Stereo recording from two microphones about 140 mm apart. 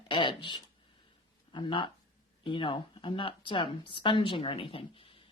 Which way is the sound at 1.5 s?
35° left (ahead or behind).